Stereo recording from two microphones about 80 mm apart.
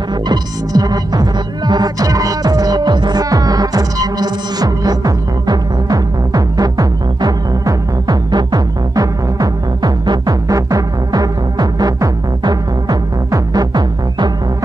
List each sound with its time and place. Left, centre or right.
0.3 s throbbing: right
13.3 s music: right